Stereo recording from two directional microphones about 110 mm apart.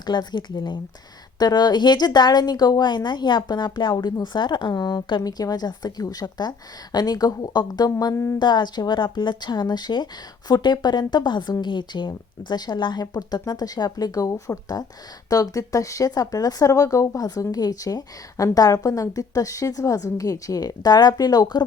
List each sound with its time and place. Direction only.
0.0 s speech: 40° left (ahead or behind)
8.4 s speech: 40° left (ahead or behind)